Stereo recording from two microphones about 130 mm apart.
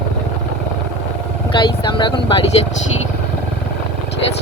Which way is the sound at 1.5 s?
40° left (ahead or behind).